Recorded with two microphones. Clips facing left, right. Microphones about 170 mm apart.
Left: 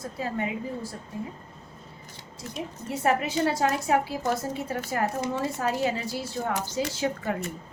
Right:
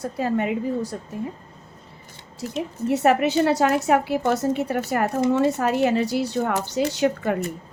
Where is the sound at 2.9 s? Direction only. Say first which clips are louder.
Right 7 dB; 70° right (ahead or behind).